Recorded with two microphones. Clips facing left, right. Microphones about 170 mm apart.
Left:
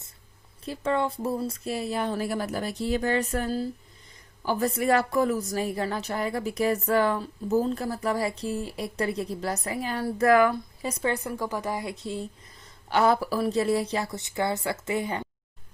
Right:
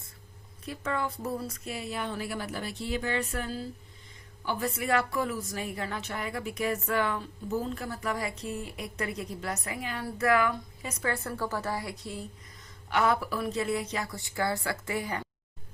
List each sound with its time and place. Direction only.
0.6 s a woman's voice: 30° left (ahead or behind)
11.1 s a woman's voice: 15° left (ahead or behind)